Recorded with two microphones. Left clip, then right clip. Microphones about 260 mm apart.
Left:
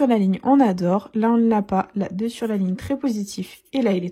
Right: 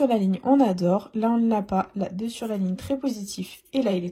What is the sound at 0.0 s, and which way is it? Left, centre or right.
Speech, right.